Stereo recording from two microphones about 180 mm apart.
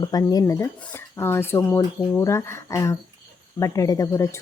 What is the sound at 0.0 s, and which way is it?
Speech, 20° left (ahead or behind).